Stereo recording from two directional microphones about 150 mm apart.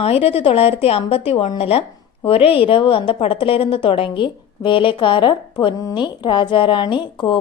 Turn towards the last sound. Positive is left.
turn(degrees=30)  # may be behind; listen again after turning